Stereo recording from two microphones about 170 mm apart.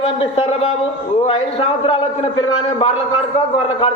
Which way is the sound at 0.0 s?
35° left (ahead or behind).